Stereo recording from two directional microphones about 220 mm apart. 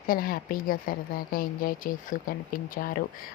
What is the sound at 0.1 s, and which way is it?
A woman's voice, 40° left (ahead or behind).